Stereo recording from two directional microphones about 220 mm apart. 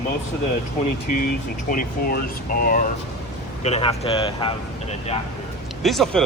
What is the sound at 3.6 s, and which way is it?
Speech, 30° left (ahead or behind).